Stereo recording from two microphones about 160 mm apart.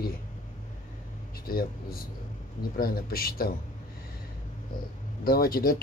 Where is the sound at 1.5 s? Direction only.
70° left (ahead or behind).